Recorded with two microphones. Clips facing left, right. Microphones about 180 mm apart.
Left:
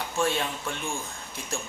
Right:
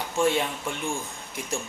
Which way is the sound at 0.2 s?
15° right (ahead or behind).